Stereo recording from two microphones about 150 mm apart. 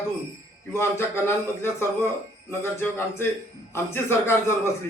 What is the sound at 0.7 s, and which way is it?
A man's voice, 15° left (ahead or behind).